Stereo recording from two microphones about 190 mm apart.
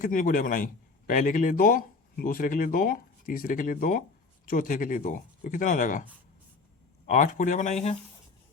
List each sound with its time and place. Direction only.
0.0 s a man's voice: 45° left (ahead or behind)
7.1 s speech: 40° left (ahead or behind)